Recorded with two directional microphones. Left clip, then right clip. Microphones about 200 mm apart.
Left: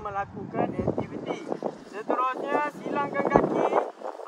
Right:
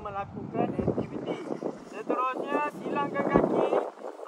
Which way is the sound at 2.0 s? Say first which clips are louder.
Left 3 dB; 50° left (ahead or behind).